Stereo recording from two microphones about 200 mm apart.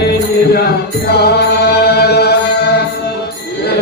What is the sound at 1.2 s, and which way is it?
Music, 55° left (ahead or behind).